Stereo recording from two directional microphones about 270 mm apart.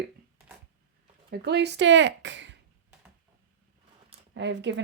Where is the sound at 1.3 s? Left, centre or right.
Right.